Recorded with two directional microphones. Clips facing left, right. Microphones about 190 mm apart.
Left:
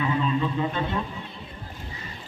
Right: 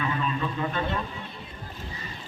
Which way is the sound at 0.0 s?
20° left (ahead or behind).